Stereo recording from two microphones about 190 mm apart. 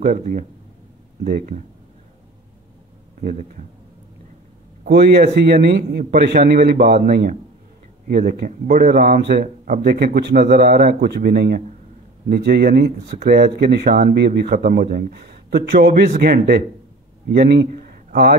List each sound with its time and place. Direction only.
0.0 s speech: 45° right (ahead or behind)
3.2 s speech: 45° right (ahead or behind)
4.8 s speech: 60° right (ahead or behind)
8.1 s speech: 45° right (ahead or behind)
17.6 s a sound: 50° right (ahead or behind)